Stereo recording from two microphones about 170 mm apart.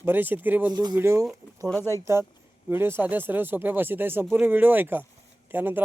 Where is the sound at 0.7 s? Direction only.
20° right (ahead or behind).